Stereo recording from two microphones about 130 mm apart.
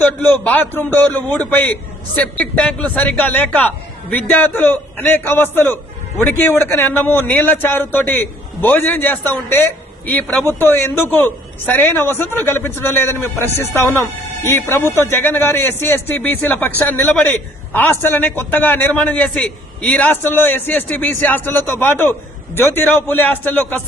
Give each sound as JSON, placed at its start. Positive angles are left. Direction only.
{"t": 0.0, "sound": "a man's voice", "side_deg": 10}